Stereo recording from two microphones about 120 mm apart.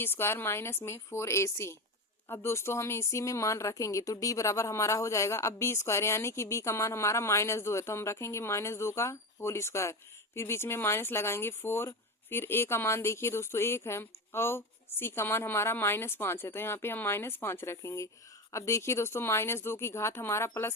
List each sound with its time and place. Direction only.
0.0 s speech: 20° left (ahead or behind)